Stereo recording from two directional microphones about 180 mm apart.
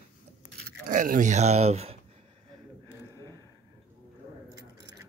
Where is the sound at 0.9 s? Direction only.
45° right (ahead or behind).